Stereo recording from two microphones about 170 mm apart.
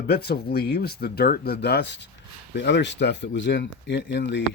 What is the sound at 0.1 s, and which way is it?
Speech, 65° left (ahead or behind).